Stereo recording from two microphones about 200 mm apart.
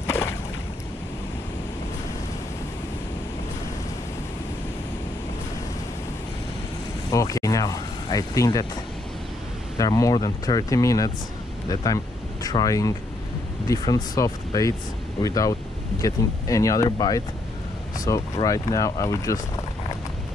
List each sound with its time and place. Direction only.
0.0 s boat: 15° left (ahead or behind)
7.1 s speech: 15° left (ahead or behind)
9.8 s speech: 15° left (ahead or behind)